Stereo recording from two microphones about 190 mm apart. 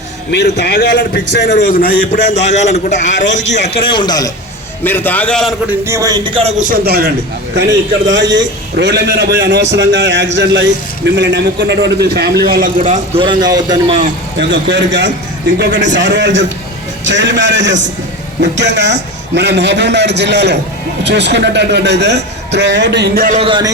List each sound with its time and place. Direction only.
0.3 s a man's voice: 60° left (ahead or behind); by 3.6 s 40° left (ahead or behind)
3.8 s a man's voice: 25° left (ahead or behind)
4.8 s a man's voice: 10° left (ahead or behind)
5.8 s a man's voice: 15° right (ahead or behind)
6.6 s speech: 50° right (ahead or behind)
7.5 s a man's voice: 70° right (ahead or behind); by 13.0 s 40° right (ahead or behind)
13.1 s a man's voice: 25° right (ahead or behind)
14.3 s a man's voice: 70° right (ahead or behind)
15.5 s a man's voice: 60° right (ahead or behind)
23.4 s a man's voice: 25° right (ahead or behind)